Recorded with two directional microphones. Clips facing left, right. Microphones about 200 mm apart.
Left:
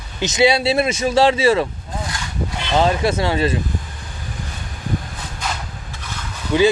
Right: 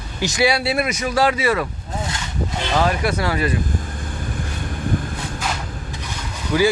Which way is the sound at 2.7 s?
25° left (ahead or behind).